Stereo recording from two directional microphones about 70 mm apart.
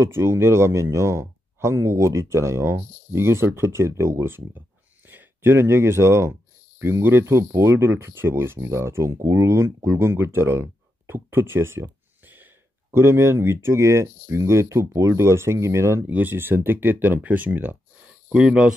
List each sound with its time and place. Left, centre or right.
0.0 s speech: right
16.1 s speech: right